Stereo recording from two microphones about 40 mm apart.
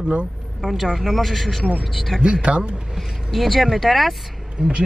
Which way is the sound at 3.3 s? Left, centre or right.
Centre.